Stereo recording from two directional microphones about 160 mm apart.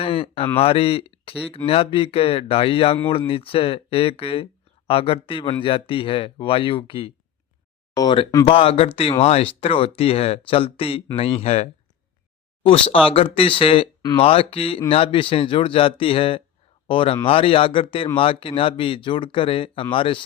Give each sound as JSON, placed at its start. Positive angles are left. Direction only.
{"t": 0.0, "sound": "speech", "side_deg": 35}